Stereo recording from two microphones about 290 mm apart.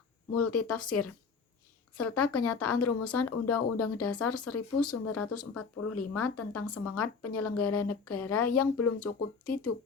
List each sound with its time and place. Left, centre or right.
0.3 s speech: left